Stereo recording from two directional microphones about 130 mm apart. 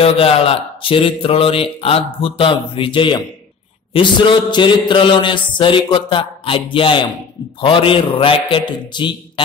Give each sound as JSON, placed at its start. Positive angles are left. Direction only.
{"t": 0.0, "sound": "speech", "side_deg": 45}
{"t": 2.2, "sound": "a sound", "side_deg": 40}
{"t": 7.6, "sound": "speech", "side_deg": 45}